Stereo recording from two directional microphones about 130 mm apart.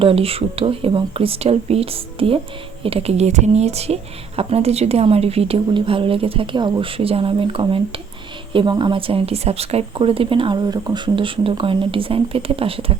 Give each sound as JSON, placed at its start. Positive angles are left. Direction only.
{"t": 0.0, "sound": "a woman's voice", "side_deg": -45}